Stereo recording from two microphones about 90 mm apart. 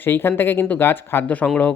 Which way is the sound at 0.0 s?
25° left (ahead or behind).